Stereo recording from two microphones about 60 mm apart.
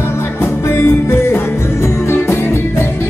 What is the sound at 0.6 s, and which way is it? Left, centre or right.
Music, left.